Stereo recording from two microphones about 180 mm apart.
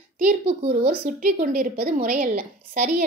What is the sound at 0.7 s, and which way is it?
A woman's voice, 55° right (ahead or behind).